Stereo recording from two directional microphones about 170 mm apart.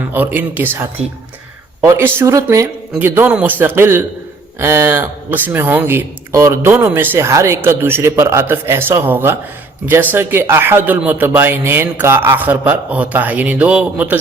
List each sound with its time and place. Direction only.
0.1 s speech: 10° right (ahead or behind)